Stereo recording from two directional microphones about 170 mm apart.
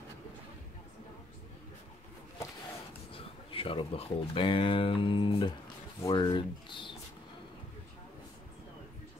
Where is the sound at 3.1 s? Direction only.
30° left (ahead or behind).